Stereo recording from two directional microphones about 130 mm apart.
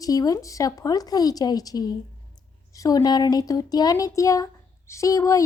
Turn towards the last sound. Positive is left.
turn(degrees=25)  # may be behind; listen again after turning